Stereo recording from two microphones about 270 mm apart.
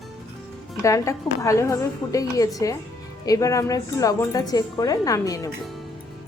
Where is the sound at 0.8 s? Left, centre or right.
Centre.